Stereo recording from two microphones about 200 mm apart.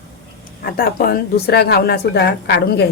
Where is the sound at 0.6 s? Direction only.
50° left (ahead or behind).